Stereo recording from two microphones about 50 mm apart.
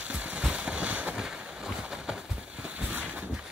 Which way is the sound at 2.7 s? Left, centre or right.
Right.